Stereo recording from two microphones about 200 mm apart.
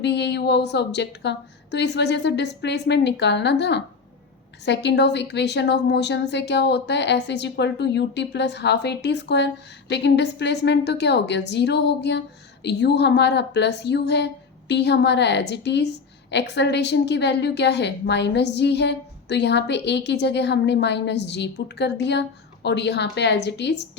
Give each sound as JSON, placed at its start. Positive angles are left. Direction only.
{"t": 0.0, "sound": "a woman's voice", "side_deg": 60}